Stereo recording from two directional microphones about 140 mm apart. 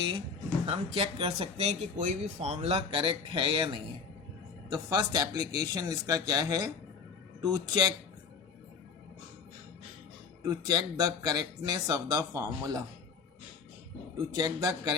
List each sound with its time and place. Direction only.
0.6 s speech: 45° right (ahead or behind)
4.7 s speech: 30° right (ahead or behind)
10.4 s speech: 30° right (ahead or behind)
14.3 s speech: 25° right (ahead or behind)